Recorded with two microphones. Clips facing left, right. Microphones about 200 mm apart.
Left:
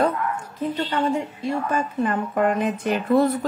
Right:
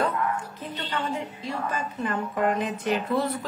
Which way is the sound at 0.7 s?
55° left (ahead or behind).